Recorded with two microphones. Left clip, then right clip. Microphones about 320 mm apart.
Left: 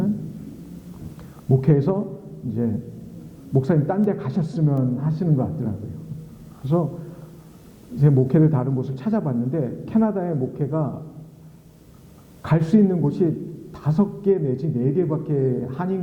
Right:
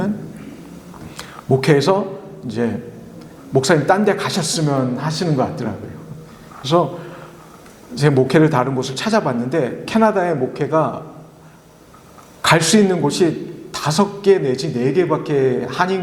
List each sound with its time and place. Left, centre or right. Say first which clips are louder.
1.6 s a man's voice: right 8 dB; centre
6.8 s a sound: right 7 dB; centre
7.9 s a man's voice: right 6 dB; centre
12.4 s a man's voice: right 8 dB; centre